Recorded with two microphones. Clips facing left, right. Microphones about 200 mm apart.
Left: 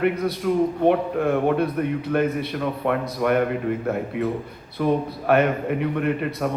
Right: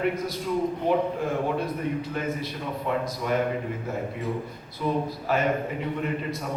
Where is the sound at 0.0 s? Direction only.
65° left (ahead or behind).